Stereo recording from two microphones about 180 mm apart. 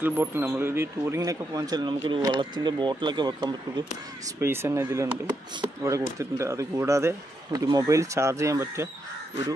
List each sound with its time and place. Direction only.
0.0 s speech: 10° right (ahead or behind)
4.4 s speech: 15° right (ahead or behind)